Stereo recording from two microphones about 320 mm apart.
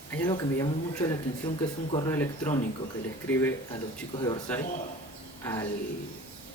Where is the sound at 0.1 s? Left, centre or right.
Centre.